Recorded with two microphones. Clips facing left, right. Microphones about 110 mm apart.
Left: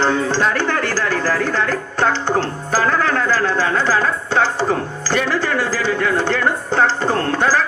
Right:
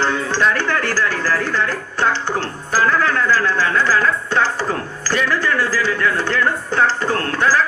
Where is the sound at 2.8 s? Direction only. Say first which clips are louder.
Right 1 dB; 35° left (ahead or behind).